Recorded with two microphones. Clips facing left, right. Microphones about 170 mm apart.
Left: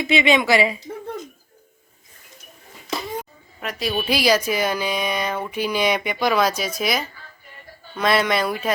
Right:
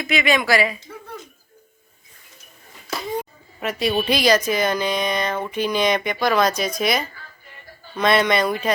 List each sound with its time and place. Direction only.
0.0 s speech: 25° left (ahead or behind)
3.6 s speech: centre (ahead or behind)